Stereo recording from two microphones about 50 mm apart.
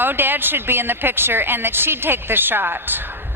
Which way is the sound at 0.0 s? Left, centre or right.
Right.